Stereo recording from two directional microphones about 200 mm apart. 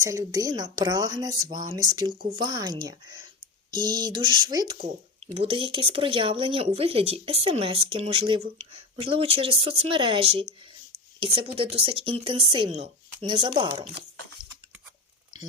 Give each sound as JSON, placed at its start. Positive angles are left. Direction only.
{"t": 0.0, "sound": "speech", "side_deg": -15}